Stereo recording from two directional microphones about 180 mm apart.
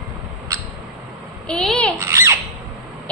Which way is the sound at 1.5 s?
5° left (ahead or behind).